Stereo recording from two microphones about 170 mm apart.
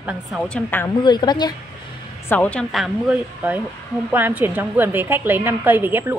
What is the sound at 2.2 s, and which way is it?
A woman's voice, 10° left (ahead or behind).